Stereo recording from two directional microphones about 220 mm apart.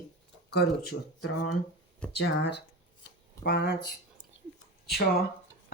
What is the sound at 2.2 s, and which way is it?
A woman's voice, 50° left (ahead or behind).